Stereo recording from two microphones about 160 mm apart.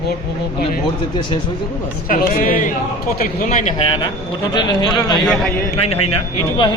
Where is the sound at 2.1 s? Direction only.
60° left (ahead or behind).